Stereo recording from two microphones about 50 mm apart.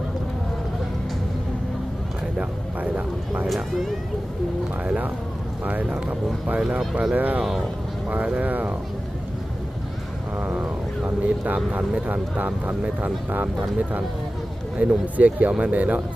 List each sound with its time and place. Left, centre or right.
2.4 s speech: right
3.4 s speech: centre
5.6 s speech: right
7.2 s speech: right
10.4 s speech: right